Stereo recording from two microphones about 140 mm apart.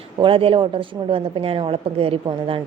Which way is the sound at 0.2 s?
40° right (ahead or behind).